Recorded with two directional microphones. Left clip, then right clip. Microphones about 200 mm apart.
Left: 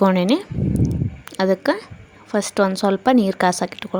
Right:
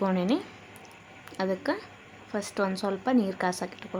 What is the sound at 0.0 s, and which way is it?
Speech, 40° left (ahead or behind).